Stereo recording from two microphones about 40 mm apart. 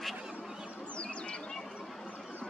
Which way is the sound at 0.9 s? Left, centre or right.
Left.